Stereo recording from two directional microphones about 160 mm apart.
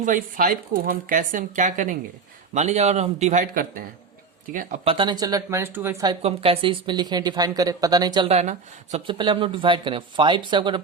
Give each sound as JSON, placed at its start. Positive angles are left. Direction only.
{"t": 0.0, "sound": "speech", "side_deg": -55}
{"t": 3.5, "sound": "speech", "side_deg": -65}
{"t": 4.9, "sound": "speech", "side_deg": -30}
{"t": 6.1, "sound": "speech", "side_deg": -35}
{"t": 8.3, "sound": "speech", "side_deg": -45}
{"t": 9.0, "sound": "speech", "side_deg": -30}